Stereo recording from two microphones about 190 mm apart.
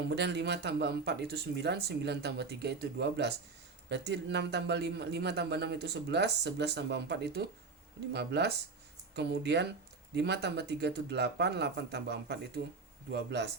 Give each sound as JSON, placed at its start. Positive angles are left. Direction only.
{"t": 0.0, "sound": "speech", "side_deg": -65}